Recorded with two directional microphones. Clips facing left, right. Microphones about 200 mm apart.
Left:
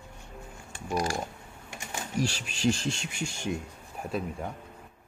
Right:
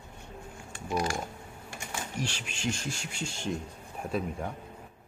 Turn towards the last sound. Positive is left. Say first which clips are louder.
# right 1 dB
turn(degrees=0)  # may be behind; listen again after turning